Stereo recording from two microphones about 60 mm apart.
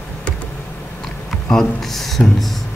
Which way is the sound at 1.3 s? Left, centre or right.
Centre.